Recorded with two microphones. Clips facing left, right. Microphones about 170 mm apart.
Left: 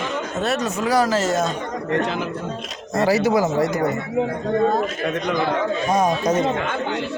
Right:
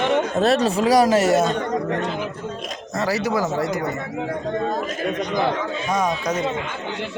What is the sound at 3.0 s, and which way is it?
Speech, 20° left (ahead or behind).